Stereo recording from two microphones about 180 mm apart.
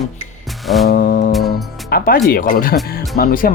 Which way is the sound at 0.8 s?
55° left (ahead or behind).